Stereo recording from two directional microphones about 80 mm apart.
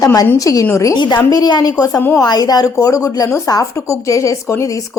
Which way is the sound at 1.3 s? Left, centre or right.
Left.